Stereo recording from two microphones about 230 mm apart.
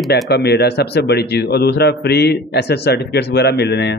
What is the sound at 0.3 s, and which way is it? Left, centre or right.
A man's voice, left.